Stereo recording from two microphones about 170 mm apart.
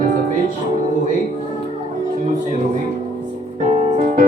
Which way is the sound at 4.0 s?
45° right (ahead or behind).